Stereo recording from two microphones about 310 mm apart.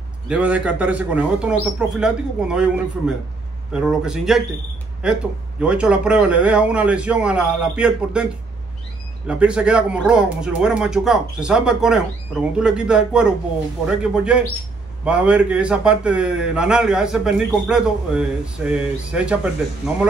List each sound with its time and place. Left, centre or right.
0.3 s speech: centre
9.3 s speech: centre